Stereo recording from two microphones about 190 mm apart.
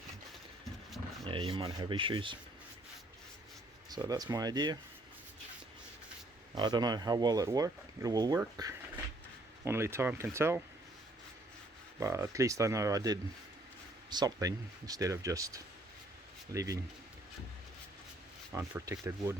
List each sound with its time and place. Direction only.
0.9 s a sound: centre (ahead or behind)
1.3 s speech: 25° right (ahead or behind)
3.8 s speech: 20° right (ahead or behind)
6.6 s speech: 20° right (ahead or behind)
11.9 s speech: 15° right (ahead or behind)
18.5 s speech: 15° right (ahead or behind)